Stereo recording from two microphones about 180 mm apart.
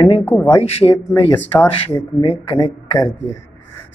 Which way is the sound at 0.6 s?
35° left (ahead or behind).